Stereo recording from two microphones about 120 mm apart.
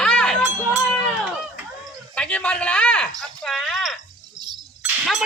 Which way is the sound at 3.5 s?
5° right (ahead or behind).